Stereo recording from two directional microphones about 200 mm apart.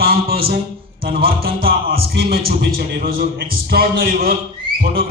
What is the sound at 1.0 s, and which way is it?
A man's voice, 50° right (ahead or behind).